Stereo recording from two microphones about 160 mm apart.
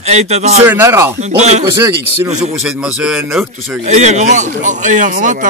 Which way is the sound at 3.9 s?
45° right (ahead or behind).